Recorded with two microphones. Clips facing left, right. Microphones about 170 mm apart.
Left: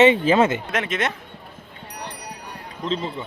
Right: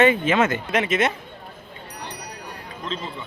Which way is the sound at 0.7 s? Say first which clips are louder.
Right 3 dB; 5° right (ahead or behind).